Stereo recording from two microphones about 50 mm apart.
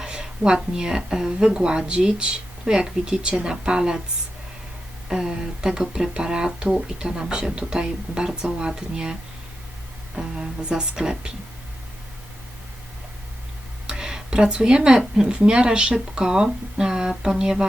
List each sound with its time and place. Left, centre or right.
0.0 s speech: centre
5.0 s speech: centre
10.2 s speech: centre
13.8 s speech: centre